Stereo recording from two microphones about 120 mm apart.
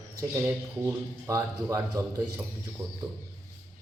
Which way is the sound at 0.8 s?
30° right (ahead or behind).